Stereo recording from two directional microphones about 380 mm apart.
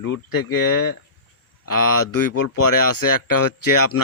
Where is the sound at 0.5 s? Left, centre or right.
Left.